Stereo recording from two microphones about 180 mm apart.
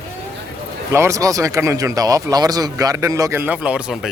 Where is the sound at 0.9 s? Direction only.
15° right (ahead or behind).